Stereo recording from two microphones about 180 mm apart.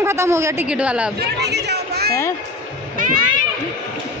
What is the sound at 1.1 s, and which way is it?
Speech, 65° right (ahead or behind).